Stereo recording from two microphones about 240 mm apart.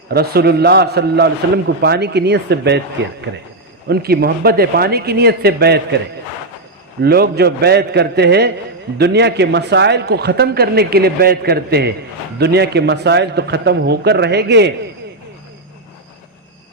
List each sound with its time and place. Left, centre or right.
0.1 s a man's voice: right
7.0 s a man's voice: right